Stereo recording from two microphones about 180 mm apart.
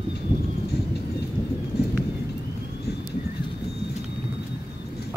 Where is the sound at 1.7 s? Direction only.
65° left (ahead or behind).